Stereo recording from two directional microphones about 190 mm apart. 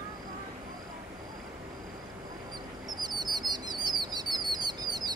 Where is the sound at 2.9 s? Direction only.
20° right (ahead or behind).